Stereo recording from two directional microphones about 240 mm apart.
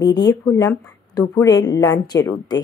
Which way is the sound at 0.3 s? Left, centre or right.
Centre.